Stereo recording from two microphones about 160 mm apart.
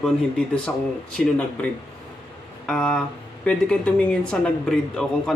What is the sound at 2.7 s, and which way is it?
Speech, 5° left (ahead or behind).